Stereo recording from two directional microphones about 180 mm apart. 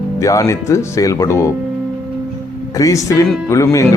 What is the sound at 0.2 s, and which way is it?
Speech, 15° left (ahead or behind).